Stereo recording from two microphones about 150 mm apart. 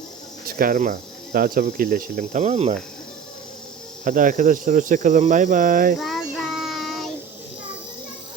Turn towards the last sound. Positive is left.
turn(degrees=0)  # may be behind; listen again after turning